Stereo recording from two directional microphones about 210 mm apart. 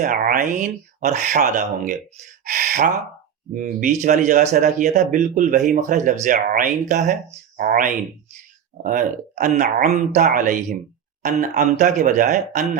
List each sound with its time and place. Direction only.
0.0 s speech: 40° right (ahead or behind)
2.4 s a sound: 40° right (ahead or behind)
3.5 s speech: 40° right (ahead or behind)